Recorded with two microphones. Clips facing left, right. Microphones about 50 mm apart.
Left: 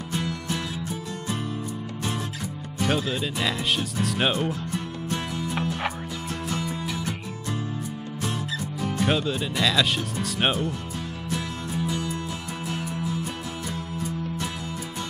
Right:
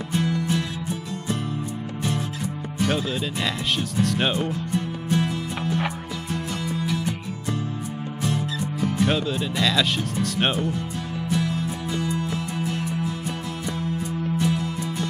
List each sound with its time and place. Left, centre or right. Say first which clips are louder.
0.1 s music: right 6 dB; centre
2.8 s music: right 1 dB; centre
8.8 s speech: right 2 dB; centre
11.3 s music: right 4 dB; centre
14.4 s music: right 7 dB; centre